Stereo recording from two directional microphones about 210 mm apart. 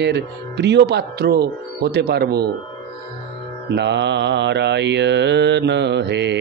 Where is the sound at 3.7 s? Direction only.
55° right (ahead or behind).